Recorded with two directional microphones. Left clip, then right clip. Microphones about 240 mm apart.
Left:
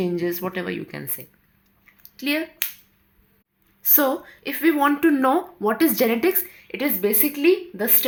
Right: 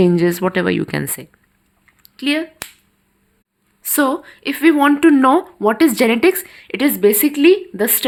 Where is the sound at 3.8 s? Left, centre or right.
Right.